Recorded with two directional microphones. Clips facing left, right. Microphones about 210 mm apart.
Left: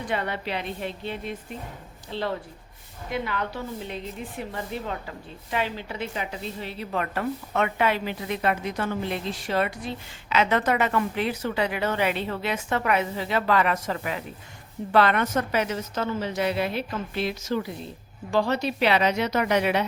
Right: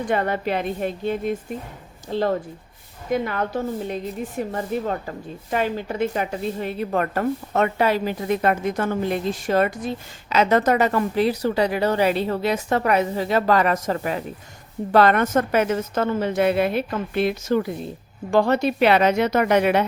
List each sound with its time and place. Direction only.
0.0 s a woman's voice: 45° right (ahead or behind)